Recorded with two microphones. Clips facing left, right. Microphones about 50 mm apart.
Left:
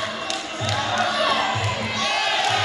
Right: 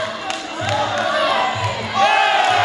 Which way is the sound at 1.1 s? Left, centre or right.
Right.